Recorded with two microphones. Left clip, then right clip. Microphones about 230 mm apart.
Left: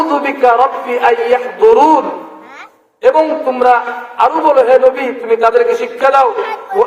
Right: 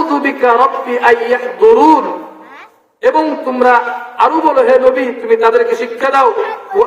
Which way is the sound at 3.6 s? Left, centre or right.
Right.